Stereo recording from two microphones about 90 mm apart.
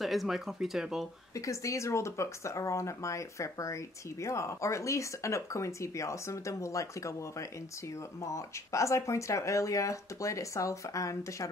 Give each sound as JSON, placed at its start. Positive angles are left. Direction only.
{"t": 0.0, "sound": "speech", "side_deg": 0}
{"t": 1.3, "sound": "speech", "side_deg": 35}